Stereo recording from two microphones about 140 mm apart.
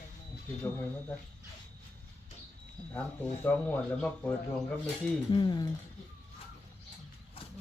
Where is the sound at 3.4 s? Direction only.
15° left (ahead or behind).